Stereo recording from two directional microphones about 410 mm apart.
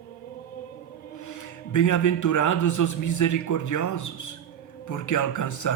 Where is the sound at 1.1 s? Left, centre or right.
Left.